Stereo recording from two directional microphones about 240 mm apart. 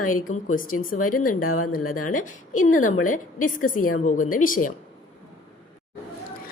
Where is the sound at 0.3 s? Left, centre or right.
Left.